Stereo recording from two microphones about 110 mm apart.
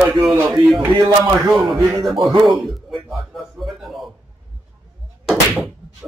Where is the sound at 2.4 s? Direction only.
Centre (ahead or behind).